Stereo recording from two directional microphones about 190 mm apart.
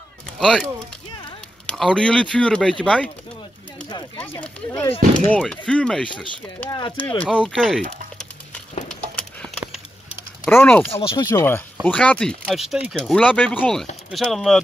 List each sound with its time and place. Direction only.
0.4 s speech: 5° left (ahead or behind)
1.7 s speech: 5° left (ahead or behind)
4.2 s speech: 5° left (ahead or behind)
9.1 s a sound: 5° left (ahead or behind)
10.5 s speech: 10° left (ahead or behind)
10.9 s speech: 30° left (ahead or behind); by 14.6 s centre (ahead or behind)